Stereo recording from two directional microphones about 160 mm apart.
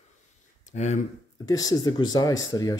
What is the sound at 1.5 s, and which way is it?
Speech, 25° left (ahead or behind).